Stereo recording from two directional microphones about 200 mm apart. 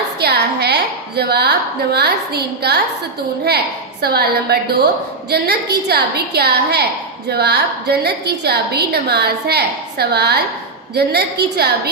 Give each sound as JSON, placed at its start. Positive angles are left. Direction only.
{"t": 0.2, "sound": "a woman's voice", "side_deg": -55}
{"t": 4.0, "sound": "a woman's voice", "side_deg": -50}